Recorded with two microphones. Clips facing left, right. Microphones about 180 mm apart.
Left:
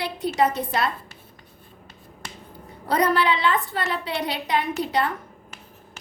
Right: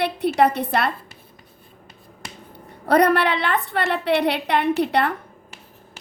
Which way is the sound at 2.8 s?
60° right (ahead or behind).